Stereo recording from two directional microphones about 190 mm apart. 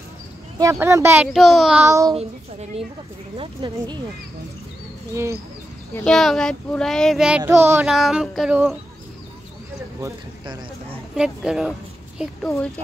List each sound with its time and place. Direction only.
0.6 s speech: 15° right (ahead or behind)
3.3 s speech: 25° right (ahead or behind)
5.1 s speech: 15° right (ahead or behind)
6.0 s child singing: centre (ahead or behind)
7.9 s child singing: centre (ahead or behind)
9.9 s speech: 20° right (ahead or behind)
11.1 s child singing: 5° right (ahead or behind)